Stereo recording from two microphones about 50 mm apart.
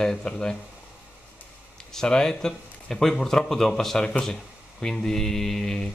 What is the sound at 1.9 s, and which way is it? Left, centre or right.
Speech, centre.